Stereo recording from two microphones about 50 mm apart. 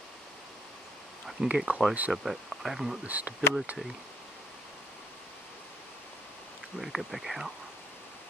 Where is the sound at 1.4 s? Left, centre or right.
Centre.